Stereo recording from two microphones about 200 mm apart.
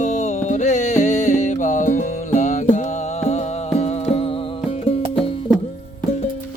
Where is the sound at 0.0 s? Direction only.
35° left (ahead or behind).